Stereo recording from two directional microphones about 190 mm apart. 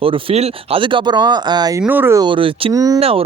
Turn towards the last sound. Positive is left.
turn(degrees=-30)  # may be behind; listen again after turning